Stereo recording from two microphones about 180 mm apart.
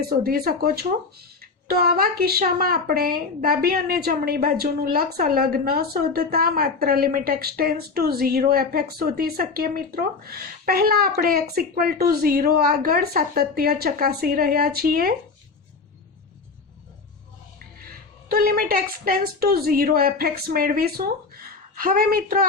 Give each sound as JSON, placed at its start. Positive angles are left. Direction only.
{"t": 0.0, "sound": "a woman's voice", "side_deg": -55}
{"t": 18.3, "sound": "a woman's voice", "side_deg": -55}